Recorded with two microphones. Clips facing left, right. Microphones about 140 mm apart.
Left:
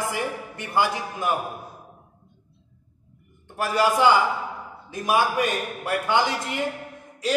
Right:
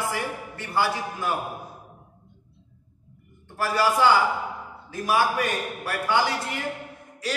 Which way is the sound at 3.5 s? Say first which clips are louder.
Left 1 dB; 20° left (ahead or behind).